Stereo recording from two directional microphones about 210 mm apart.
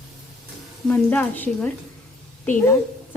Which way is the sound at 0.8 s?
5° left (ahead or behind).